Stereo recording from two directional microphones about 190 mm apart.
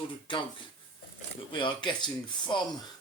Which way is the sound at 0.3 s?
25° left (ahead or behind).